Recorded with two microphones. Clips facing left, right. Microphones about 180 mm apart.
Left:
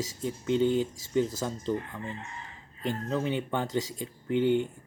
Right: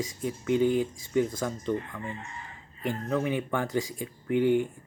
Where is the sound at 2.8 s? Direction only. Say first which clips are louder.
Right 1 dB; 25° left (ahead or behind).